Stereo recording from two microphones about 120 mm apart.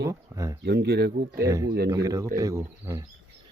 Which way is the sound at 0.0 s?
25° right (ahead or behind).